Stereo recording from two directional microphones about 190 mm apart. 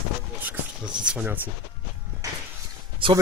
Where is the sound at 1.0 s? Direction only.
5° right (ahead or behind).